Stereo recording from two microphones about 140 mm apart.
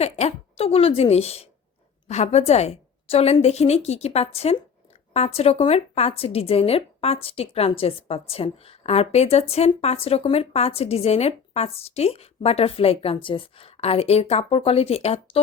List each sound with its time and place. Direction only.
0.0 s a woman's voice: 50° left (ahead or behind)